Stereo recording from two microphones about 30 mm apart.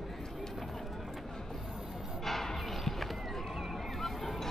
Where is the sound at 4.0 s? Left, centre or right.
Centre.